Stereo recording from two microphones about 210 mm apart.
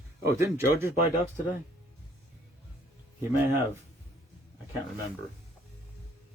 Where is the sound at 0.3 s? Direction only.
15° right (ahead or behind).